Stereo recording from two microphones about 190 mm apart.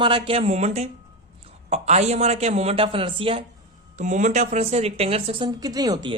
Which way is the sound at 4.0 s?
40° right (ahead or behind).